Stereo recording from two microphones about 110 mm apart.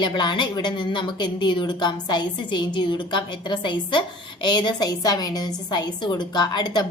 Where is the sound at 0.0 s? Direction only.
45° left (ahead or behind).